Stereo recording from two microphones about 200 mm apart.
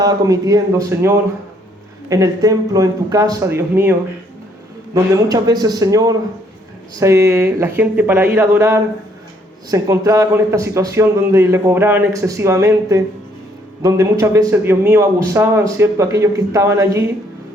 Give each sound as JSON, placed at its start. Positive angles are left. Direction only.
{"t": 0.0, "sound": "a man's voice", "side_deg": -20}
{"t": 4.9, "sound": "a man's voice", "side_deg": -15}